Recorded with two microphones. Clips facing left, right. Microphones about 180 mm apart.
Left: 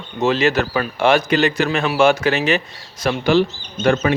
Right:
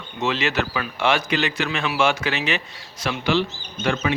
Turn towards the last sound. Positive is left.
turn(degrees=45)  # may be behind; listen again after turning